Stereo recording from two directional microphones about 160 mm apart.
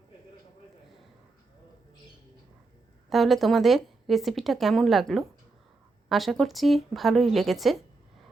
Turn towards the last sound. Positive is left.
turn(degrees=0)  # may be behind; listen again after turning